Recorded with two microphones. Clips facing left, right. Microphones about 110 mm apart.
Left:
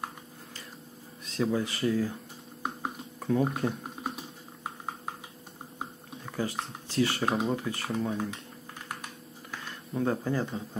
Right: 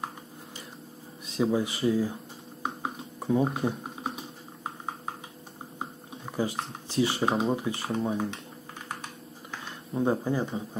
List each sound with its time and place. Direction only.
1.2 s speech: 20° right (ahead or behind)
3.2 s typing: 15° right (ahead or behind)
6.2 s speech: 15° right (ahead or behind)
7.2 s speech: 5° right (ahead or behind)
7.4 s speech: 15° right (ahead or behind)
9.5 s speech: 20° right (ahead or behind)